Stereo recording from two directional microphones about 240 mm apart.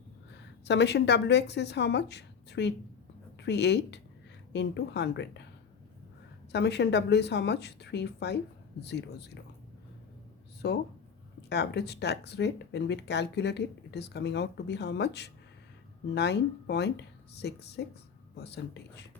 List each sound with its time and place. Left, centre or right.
0.3 s a woman's voice: left
6.5 s speech: left
10.6 s speech: left